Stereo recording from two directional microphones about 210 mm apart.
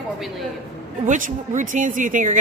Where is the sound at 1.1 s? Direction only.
35° right (ahead or behind).